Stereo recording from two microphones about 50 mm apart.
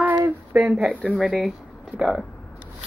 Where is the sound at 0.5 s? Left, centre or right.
Centre.